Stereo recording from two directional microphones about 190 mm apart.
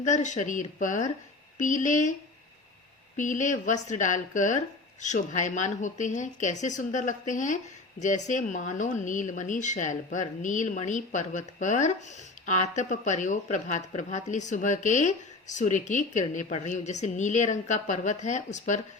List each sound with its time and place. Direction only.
0.0 s speech: 40° left (ahead or behind)
3.2 s speech: 40° left (ahead or behind)